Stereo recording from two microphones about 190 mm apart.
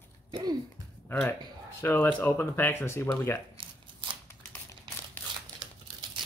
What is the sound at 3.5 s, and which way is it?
Shuffling cards, 25° right (ahead or behind).